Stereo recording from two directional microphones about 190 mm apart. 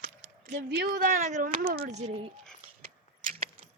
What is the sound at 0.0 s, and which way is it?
Speech, 60° right (ahead or behind).